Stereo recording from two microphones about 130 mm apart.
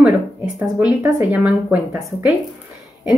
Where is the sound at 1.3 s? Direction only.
10° right (ahead or behind).